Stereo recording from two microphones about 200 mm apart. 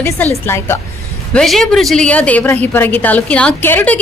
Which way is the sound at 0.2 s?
10° left (ahead or behind).